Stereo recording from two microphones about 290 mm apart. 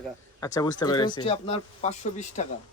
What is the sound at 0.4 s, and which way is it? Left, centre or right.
Speech, centre.